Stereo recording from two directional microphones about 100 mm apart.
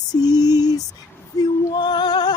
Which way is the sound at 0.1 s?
40° left (ahead or behind).